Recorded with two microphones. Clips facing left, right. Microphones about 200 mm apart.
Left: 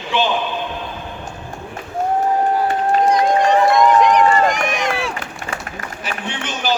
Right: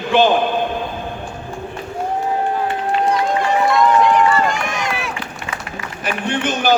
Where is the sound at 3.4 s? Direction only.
15° left (ahead or behind).